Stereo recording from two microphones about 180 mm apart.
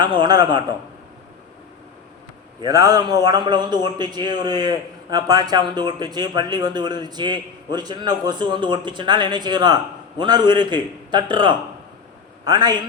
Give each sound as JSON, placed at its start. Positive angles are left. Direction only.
{"t": 0.0, "sound": "a man's voice", "side_deg": -25}
{"t": 2.6, "sound": "a man's voice", "side_deg": -20}